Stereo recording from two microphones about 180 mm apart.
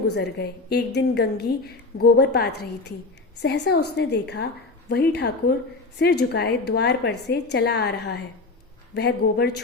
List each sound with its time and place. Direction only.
0.1 s a woman's voice: 65° left (ahead or behind)